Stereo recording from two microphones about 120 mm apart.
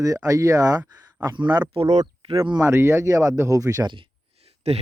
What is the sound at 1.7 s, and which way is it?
Speech, 50° right (ahead or behind).